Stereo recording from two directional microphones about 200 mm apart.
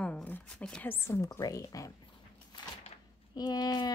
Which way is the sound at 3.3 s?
20° left (ahead or behind).